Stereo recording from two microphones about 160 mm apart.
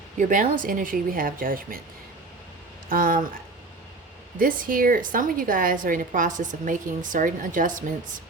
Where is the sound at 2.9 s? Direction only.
60° right (ahead or behind).